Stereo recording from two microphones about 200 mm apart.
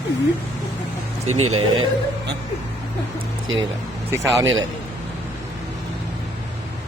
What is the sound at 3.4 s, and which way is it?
Speech, 75° right (ahead or behind).